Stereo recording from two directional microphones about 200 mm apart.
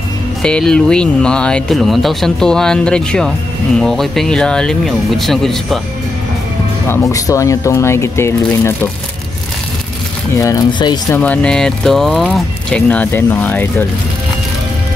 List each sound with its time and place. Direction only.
0.4 s speech: 5° left (ahead or behind)
6.9 s speech: 15° left (ahead or behind)
10.3 s speech: 15° left (ahead or behind)
11.1 s speech: 5° left (ahead or behind)